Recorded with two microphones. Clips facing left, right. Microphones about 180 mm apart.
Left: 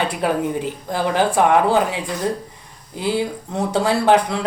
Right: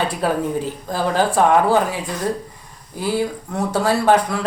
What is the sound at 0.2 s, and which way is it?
Speech, 20° left (ahead or behind).